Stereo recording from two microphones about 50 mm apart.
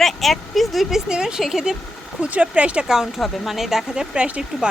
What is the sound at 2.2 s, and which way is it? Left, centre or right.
Speech, right.